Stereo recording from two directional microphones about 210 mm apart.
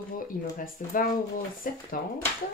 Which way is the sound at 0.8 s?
40° left (ahead or behind).